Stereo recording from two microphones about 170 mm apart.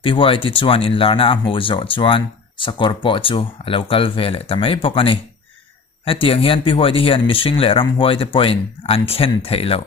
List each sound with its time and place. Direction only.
0.0 s speech: 30° left (ahead or behind)